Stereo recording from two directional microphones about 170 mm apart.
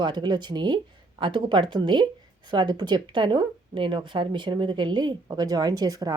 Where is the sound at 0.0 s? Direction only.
25° right (ahead or behind).